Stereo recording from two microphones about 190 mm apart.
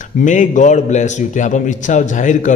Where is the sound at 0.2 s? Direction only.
40° left (ahead or behind).